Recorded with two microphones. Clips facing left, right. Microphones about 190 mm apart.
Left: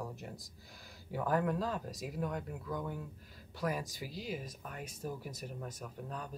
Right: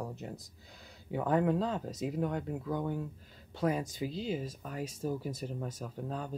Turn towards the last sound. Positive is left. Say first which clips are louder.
# right 5 dB
turn(degrees=-30)  # may be behind; listen again after turning